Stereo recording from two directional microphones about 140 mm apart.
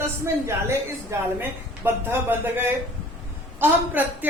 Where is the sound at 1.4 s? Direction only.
15° right (ahead or behind).